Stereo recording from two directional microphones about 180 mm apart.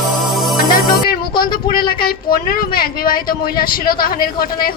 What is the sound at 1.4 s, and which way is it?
A woman's voice, 55° left (ahead or behind).